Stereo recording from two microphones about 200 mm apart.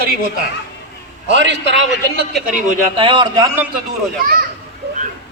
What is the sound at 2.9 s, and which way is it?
Speech, 25° right (ahead or behind).